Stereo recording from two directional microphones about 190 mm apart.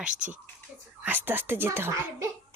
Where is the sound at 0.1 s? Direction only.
40° right (ahead or behind).